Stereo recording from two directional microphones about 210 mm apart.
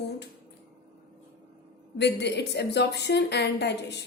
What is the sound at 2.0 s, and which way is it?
A woman's voice, 55° left (ahead or behind).